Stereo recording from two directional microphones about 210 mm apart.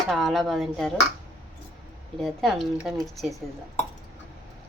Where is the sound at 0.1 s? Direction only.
Centre (ahead or behind).